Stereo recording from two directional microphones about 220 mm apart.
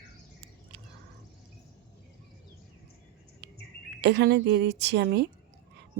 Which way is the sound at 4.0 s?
50° right (ahead or behind).